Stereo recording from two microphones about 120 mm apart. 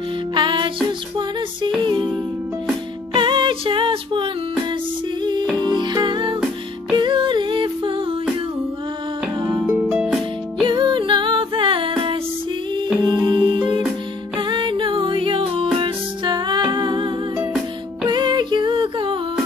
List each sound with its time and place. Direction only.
0.3 s music: 40° right (ahead or behind)
1.9 s music: 40° right (ahead or behind)
9.4 s music: 25° right (ahead or behind)
9.8 s music: 5° right (ahead or behind)
10.6 s music: 40° right (ahead or behind)